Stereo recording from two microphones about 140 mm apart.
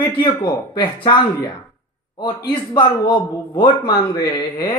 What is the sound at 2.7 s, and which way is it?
Speech, 35° left (ahead or behind).